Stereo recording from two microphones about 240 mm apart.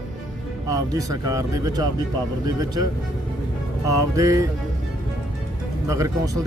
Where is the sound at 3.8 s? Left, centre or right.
Centre.